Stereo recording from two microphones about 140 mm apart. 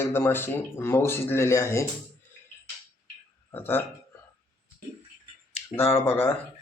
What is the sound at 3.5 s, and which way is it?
Speech, 15° left (ahead or behind).